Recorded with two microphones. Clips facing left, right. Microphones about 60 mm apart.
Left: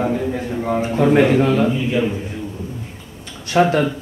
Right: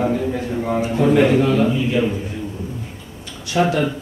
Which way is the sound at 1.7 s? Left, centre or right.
Centre.